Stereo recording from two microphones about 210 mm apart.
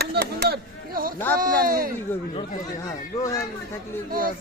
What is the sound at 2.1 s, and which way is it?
Speech, 10° left (ahead or behind).